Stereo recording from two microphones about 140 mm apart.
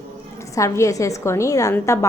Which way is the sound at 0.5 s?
20° left (ahead or behind).